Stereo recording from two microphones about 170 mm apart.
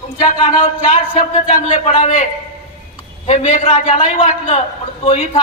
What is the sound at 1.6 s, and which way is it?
A man's voice, 30° left (ahead or behind).